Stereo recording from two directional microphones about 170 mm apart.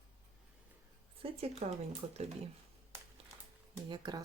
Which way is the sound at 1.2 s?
40° right (ahead or behind).